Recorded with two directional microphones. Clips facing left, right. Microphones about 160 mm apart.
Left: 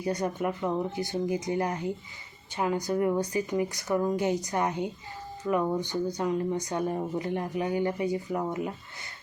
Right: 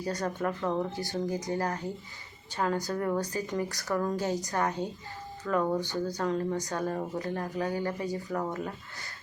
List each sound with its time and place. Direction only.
0.0 s a woman's voice: 20° left (ahead or behind)